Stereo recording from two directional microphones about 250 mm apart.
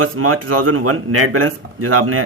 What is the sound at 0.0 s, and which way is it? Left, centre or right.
Speech, right.